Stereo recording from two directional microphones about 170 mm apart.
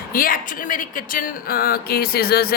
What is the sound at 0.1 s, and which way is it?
Speech, 55° left (ahead or behind).